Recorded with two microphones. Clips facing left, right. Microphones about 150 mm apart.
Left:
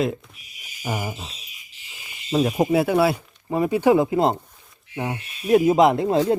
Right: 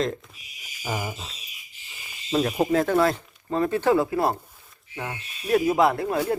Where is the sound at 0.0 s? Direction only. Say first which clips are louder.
Left 3 dB; 5° left (ahead or behind).